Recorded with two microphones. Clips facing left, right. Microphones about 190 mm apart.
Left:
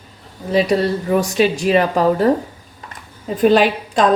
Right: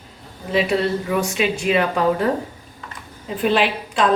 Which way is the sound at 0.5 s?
40° left (ahead or behind).